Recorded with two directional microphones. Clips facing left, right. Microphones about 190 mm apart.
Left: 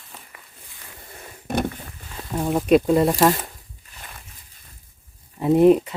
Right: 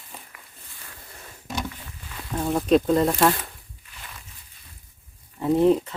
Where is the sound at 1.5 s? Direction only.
55° left (ahead or behind).